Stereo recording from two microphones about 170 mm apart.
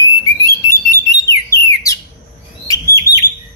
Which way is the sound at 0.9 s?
20° left (ahead or behind).